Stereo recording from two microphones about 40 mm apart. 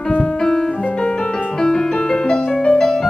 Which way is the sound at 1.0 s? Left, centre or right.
Left.